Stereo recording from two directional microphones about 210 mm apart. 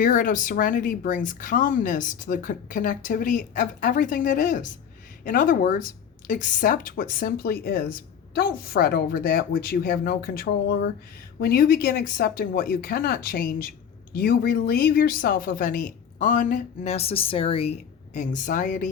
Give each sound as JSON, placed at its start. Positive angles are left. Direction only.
{"t": 0.0, "sound": "speech", "side_deg": 40}